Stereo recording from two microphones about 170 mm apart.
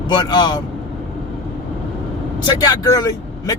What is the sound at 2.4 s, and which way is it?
Speech, 25° left (ahead or behind).